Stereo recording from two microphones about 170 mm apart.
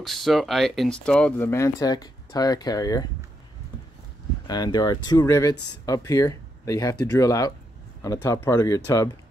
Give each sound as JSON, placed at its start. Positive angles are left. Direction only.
{"t": 0.0, "sound": "speech", "side_deg": 0}
{"t": 1.5, "sound": "speech", "side_deg": 20}
{"t": 4.5, "sound": "speech", "side_deg": 25}